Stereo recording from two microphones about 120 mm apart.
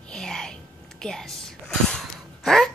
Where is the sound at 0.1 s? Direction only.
5° left (ahead or behind).